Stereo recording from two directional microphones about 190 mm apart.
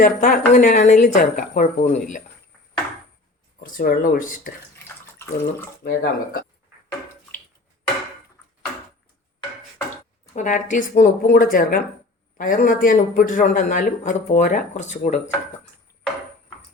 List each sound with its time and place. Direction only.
0.0 s a man's voice: 45° left (ahead or behind)
3.6 s speech: 50° left (ahead or behind)
5.1 s speech: 15° left (ahead or behind)
5.8 s speech: 50° left (ahead or behind)
10.3 s a man's voice: 40° left (ahead or behind)